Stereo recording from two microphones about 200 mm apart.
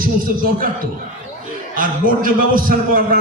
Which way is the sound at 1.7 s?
45° right (ahead or behind).